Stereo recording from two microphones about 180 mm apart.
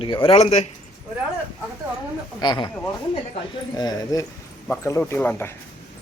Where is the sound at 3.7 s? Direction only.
20° left (ahead or behind).